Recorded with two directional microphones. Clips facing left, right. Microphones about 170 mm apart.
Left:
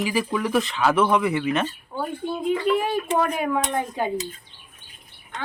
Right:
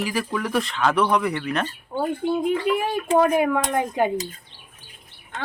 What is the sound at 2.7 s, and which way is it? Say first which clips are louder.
Speech: left 3 dB; 5° right (ahead or behind).